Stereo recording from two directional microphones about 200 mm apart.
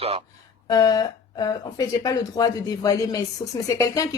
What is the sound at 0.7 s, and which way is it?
Speech, 20° left (ahead or behind).